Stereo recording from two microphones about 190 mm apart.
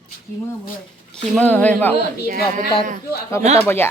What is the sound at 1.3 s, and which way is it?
Speech, 10° left (ahead or behind).